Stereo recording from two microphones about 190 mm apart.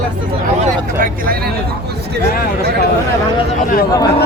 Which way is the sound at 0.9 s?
45° right (ahead or behind).